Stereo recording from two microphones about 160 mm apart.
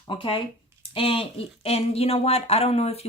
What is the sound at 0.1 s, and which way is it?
Speech, 30° left (ahead or behind).